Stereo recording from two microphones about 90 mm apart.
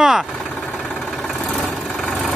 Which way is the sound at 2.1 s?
5° left (ahead or behind).